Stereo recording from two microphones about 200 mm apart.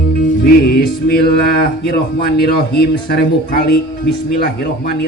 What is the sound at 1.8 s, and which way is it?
Speech, 55° left (ahead or behind).